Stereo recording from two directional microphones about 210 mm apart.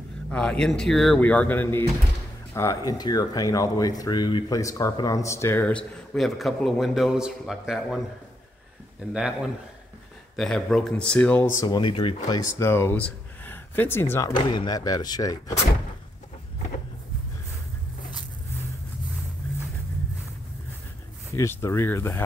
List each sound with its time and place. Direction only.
0.3 s speech: 5° left (ahead or behind)
9.1 s speech: 5° right (ahead or behind)
11.6 s speech: 20° left (ahead or behind)
21.4 s speech: 15° left (ahead or behind)